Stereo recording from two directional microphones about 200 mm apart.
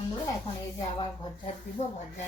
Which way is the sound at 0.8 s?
25° left (ahead or behind).